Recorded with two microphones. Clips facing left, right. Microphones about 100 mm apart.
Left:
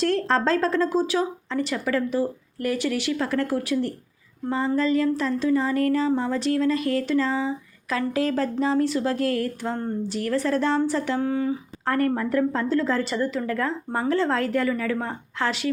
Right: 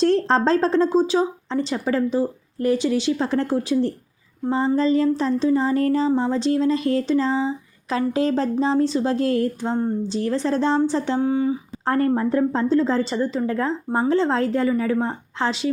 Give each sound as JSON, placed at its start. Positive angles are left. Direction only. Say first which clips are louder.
{"t": 0.0, "sound": "speech", "louder": "right 4 dB", "side_deg": -30}